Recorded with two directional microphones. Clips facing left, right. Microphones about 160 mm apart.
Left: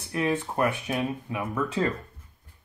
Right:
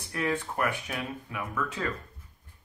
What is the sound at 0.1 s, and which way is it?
Speech, 20° left (ahead or behind).